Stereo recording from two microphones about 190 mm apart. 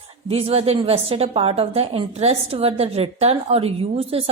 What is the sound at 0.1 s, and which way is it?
A woman's voice, 30° right (ahead or behind).